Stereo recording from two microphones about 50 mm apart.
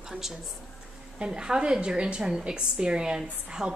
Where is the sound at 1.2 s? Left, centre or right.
Centre.